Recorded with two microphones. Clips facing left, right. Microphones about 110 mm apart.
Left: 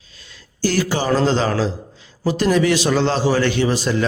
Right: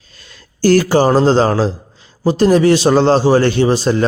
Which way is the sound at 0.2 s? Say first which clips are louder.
Right 5 dB; 50° right (ahead or behind).